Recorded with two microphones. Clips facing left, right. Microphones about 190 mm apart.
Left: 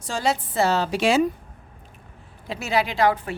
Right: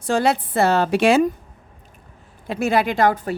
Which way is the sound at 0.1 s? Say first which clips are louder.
Right 6 dB; 60° right (ahead or behind).